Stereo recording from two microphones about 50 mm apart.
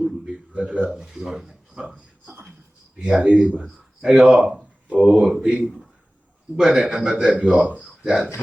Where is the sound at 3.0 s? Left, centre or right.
Centre.